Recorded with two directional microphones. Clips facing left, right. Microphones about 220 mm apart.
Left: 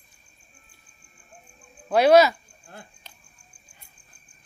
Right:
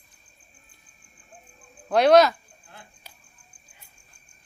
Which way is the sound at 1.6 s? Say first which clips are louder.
Even; 5° left (ahead or behind).